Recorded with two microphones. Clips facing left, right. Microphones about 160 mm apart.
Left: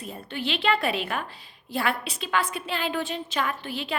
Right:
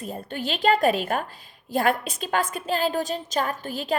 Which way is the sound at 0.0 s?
45° right (ahead or behind).